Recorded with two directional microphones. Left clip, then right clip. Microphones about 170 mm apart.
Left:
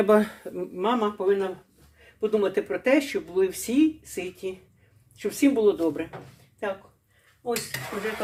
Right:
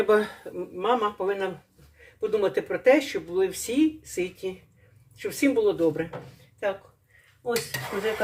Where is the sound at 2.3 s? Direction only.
15° left (ahead or behind).